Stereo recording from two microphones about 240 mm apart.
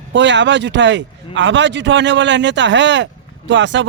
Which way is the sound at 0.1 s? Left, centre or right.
Right.